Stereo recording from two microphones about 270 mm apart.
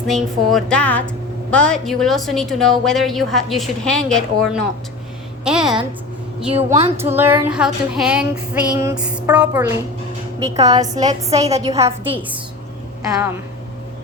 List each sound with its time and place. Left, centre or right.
0.1 s a woman's voice: centre
5.5 s a woman's voice: centre
6.5 s a woman's voice: right
7.0 s a woman's voice: centre
11.4 s a woman's voice: right
11.7 s a woman's voice: centre